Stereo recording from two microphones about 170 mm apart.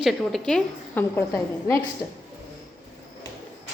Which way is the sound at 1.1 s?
15° left (ahead or behind).